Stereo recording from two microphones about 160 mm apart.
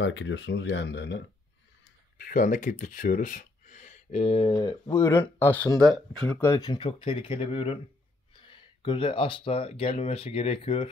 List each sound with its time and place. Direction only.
0.5 s speech: 90° left
2.1 s speech: 60° left (ahead or behind); by 10.9 s 35° left (ahead or behind)